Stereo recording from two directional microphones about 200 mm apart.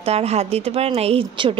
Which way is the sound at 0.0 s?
30° right (ahead or behind).